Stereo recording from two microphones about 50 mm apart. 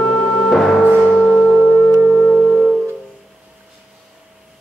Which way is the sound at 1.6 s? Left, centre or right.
Centre.